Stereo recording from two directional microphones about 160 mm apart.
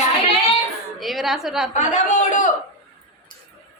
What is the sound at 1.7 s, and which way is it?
Speech, 50° left (ahead or behind).